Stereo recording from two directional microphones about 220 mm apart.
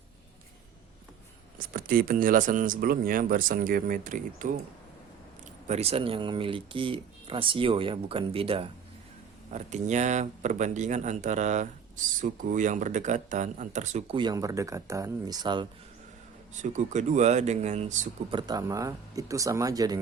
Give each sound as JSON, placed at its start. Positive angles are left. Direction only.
{"t": 1.5, "sound": "speech", "side_deg": -40}
{"t": 5.6, "sound": "speech", "side_deg": -30}
{"t": 16.6, "sound": "speech", "side_deg": -35}